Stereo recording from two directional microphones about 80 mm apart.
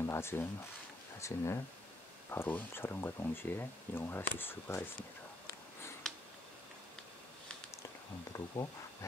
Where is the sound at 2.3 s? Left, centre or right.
Left.